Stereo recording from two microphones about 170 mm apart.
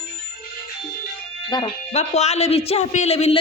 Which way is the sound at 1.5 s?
25° left (ahead or behind).